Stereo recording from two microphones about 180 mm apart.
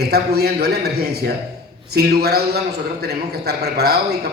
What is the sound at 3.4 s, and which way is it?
Speech, 60° right (ahead or behind).